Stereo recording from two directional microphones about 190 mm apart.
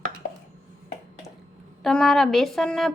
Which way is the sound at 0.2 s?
45° left (ahead or behind).